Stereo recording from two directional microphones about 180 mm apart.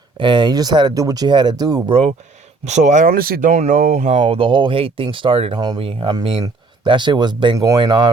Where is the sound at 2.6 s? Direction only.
40° right (ahead or behind); by 8.1 s 25° right (ahead or behind).